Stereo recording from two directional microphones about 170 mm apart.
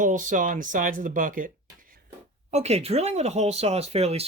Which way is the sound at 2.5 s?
40° right (ahead or behind).